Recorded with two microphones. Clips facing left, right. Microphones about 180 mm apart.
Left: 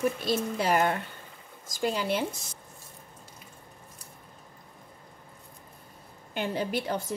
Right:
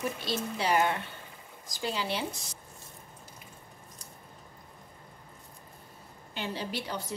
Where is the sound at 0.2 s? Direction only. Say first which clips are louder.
Left 4 dB; 50° left (ahead or behind).